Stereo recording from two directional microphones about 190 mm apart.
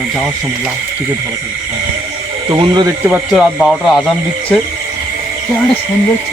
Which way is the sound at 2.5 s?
25° right (ahead or behind).